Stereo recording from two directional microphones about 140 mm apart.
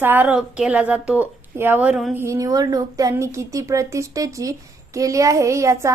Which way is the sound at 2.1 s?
20° right (ahead or behind).